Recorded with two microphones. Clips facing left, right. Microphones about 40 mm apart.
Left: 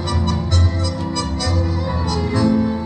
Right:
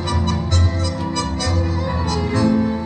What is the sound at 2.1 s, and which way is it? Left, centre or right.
Music, right.